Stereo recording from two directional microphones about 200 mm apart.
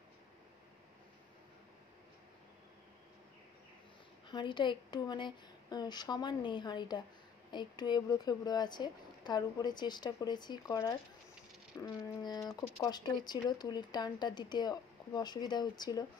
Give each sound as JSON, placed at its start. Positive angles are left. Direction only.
{"t": 4.3, "sound": "speech", "side_deg": 25}